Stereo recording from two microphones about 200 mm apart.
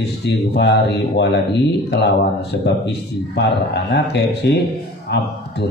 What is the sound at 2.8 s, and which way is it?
A man's voice, 55° left (ahead or behind).